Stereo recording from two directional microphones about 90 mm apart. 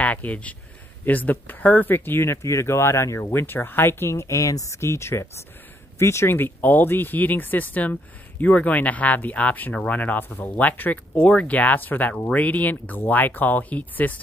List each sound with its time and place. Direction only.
0.0 s speech: 15° left (ahead or behind)